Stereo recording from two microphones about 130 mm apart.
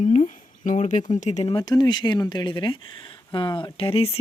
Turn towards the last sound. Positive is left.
turn(degrees=50)  # may be behind; listen again after turning